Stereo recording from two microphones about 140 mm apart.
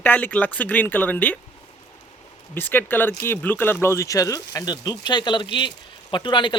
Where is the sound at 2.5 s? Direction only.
15° left (ahead or behind); by 6.6 s 35° left (ahead or behind).